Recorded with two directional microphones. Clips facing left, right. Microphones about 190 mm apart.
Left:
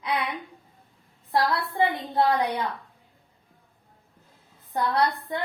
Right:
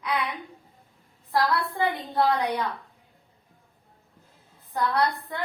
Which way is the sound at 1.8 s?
25° left (ahead or behind).